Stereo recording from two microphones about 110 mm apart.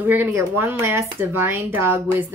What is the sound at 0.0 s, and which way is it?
Speech, 15° right (ahead or behind).